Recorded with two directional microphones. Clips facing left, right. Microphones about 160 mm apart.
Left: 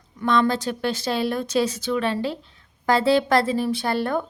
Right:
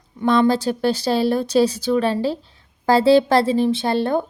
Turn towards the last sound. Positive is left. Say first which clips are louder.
# right 4 dB
turn(degrees=-30)  # may be behind; listen again after turning